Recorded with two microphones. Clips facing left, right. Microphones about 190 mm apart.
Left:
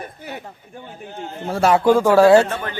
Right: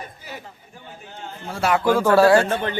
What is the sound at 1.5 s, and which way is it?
Speech, 40° left (ahead or behind).